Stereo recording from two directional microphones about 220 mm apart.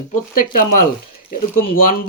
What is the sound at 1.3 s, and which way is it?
Speech, 40° left (ahead or behind).